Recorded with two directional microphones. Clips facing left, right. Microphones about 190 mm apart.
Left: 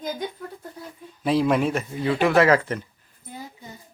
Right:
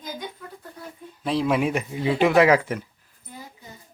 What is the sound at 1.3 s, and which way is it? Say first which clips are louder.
Speech: left 2 dB; centre (ahead or behind).